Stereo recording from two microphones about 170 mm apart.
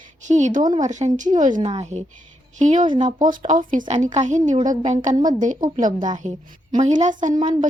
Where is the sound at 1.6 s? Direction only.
40° right (ahead or behind).